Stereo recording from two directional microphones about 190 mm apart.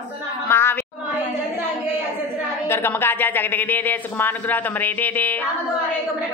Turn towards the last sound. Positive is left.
turn(degrees=10)  # may be behind; listen again after turning